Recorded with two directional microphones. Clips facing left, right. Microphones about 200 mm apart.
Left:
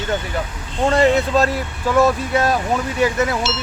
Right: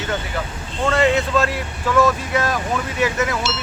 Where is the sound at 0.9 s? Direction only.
35° left (ahead or behind).